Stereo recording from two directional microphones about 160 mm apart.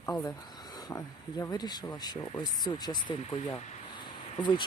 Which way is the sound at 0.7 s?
25° left (ahead or behind).